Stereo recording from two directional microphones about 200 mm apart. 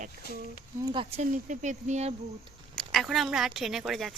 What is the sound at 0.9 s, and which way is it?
Speech, 35° right (ahead or behind).